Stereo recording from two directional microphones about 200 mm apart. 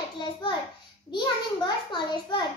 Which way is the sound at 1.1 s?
20° left (ahead or behind).